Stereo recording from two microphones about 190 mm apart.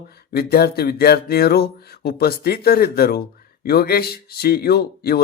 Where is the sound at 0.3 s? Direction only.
55° left (ahead or behind).